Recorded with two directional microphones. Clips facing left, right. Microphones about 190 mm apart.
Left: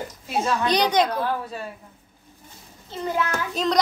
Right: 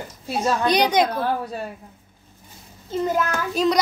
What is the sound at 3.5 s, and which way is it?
Speech, 5° right (ahead or behind).